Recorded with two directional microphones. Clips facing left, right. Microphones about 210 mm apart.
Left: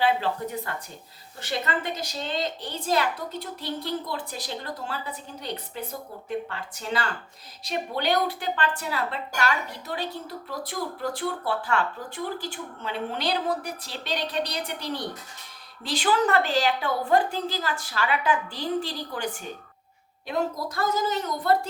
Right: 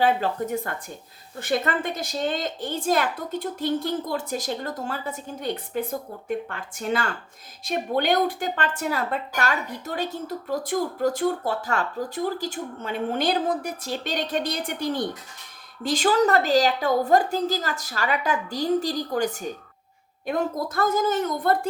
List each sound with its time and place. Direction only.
0.0 s a woman's voice: 45° right (ahead or behind)